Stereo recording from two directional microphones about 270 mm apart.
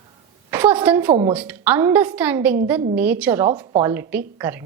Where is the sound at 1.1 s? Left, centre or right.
Centre.